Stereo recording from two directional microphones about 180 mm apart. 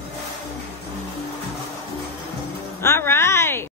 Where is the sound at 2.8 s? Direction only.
15° left (ahead or behind).